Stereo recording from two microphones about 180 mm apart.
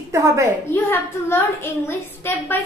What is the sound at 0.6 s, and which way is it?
A woman's voice, 15° left (ahead or behind).